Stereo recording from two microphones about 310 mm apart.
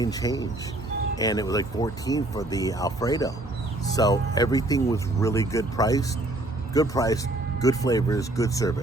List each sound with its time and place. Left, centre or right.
0.0 s speech: centre